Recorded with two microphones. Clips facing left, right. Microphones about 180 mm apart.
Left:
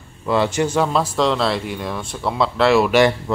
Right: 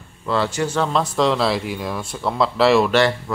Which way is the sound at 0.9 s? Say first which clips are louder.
Even; centre (ahead or behind).